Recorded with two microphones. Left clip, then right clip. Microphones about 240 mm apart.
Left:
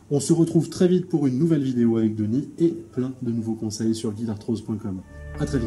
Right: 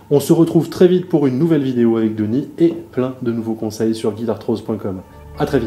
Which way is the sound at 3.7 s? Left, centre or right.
Centre.